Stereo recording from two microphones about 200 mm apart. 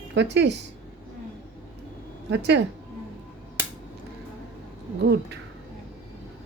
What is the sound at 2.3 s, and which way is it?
Speech, 60° right (ahead or behind).